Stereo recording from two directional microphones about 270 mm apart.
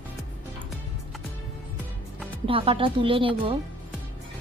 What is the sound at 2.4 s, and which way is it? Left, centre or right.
A woman's voice, centre.